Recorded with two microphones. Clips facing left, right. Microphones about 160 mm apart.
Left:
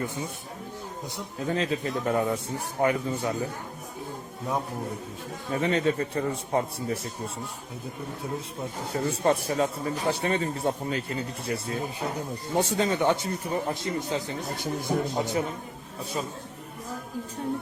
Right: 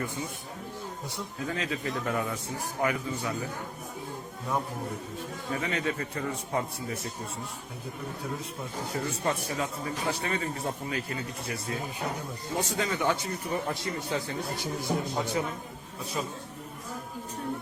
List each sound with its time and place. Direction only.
1.5 s a man's voice: 30° left (ahead or behind)
5.5 s a man's voice: 30° left (ahead or behind)
8.8 s a man's voice: 25° left (ahead or behind)
14.5 s speech: 55° left (ahead or behind)